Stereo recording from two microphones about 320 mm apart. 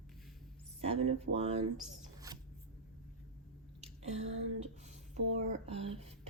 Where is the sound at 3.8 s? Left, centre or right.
Centre.